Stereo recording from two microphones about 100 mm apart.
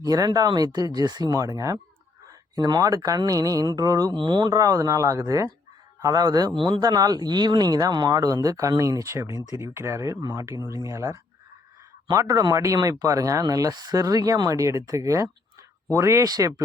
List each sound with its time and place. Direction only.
0.0 s speech: 40° right (ahead or behind)
1.4 s speech: 35° right (ahead or behind)